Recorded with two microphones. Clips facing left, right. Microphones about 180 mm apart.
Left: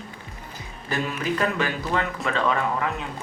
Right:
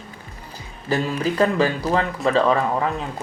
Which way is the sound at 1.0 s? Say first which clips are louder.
Right 4 dB; 35° right (ahead or behind).